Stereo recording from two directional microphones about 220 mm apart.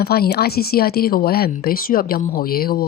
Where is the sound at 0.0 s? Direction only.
45° left (ahead or behind).